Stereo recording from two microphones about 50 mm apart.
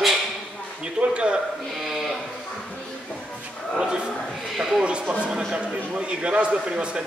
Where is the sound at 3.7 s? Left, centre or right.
Right.